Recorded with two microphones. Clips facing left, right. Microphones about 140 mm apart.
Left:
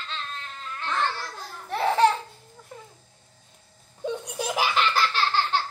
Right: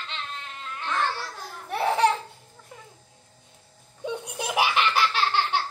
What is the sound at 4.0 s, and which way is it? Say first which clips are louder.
Laughter: left 2 dB; 10° right (ahead or behind).